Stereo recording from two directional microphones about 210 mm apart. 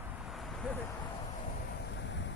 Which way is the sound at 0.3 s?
Centre (ahead or behind).